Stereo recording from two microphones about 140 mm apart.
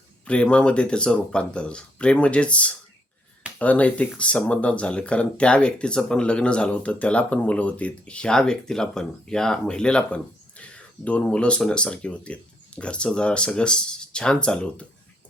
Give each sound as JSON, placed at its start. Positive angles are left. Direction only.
{"t": 0.3, "sound": "speech", "side_deg": 10}